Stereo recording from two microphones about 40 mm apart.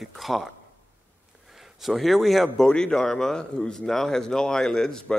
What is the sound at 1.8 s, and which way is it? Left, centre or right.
Speech, centre.